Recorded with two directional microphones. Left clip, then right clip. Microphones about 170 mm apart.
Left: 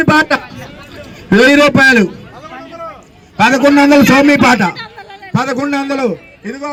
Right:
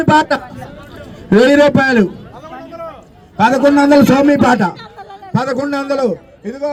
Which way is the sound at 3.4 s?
20° left (ahead or behind).